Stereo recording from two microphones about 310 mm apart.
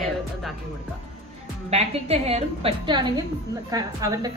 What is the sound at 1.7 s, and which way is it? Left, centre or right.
A woman's voice, centre.